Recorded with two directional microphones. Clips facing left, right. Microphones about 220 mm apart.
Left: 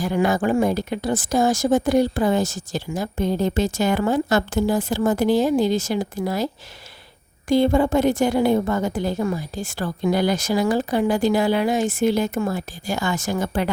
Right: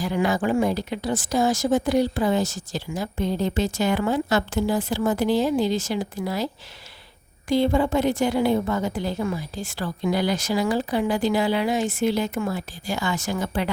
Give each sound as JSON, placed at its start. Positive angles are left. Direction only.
{"t": 0.0, "sound": "speech", "side_deg": 50}